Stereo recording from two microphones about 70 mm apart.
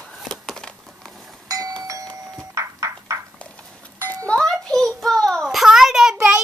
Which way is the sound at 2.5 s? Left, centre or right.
Right.